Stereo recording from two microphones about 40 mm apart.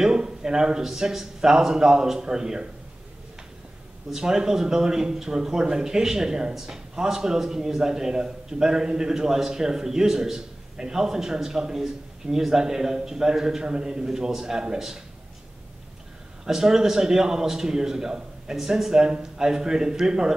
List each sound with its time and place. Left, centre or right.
0.0 s speech: centre
4.1 s speech: centre
16.4 s speech: centre